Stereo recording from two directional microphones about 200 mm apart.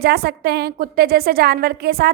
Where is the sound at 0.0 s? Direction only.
50° right (ahead or behind).